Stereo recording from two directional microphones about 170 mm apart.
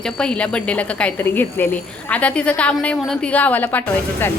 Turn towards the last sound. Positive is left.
turn(degrees=10)  # may be behind; listen again after turning